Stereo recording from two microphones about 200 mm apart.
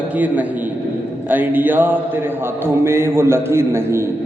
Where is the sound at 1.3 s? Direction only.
10° right (ahead or behind).